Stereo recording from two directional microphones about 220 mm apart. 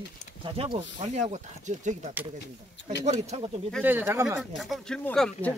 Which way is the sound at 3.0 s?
30° right (ahead or behind).